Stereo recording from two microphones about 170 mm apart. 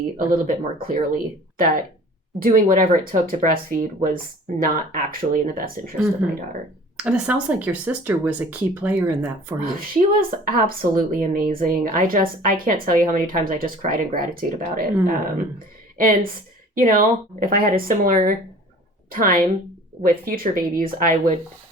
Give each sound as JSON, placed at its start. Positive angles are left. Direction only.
{"t": 0.3, "sound": "speech", "side_deg": -55}
{"t": 6.9, "sound": "speech", "side_deg": -10}
{"t": 9.6, "sound": "a woman's voice", "side_deg": -55}